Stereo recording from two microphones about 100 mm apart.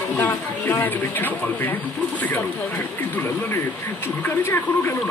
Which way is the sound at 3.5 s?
25° left (ahead or behind).